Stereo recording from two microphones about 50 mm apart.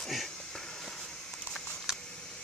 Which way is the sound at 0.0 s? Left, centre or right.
Centre.